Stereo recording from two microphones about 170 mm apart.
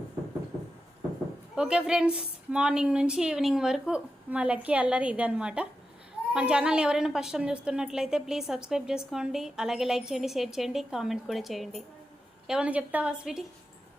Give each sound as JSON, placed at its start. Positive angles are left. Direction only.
{"t": 1.5, "sound": "a woman's voice", "side_deg": -5}